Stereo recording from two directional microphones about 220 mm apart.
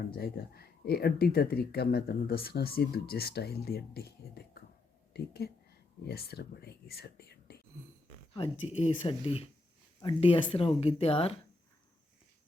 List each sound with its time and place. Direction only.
0.1 s speech: 45° left (ahead or behind)
8.4 s speech: 30° left (ahead or behind)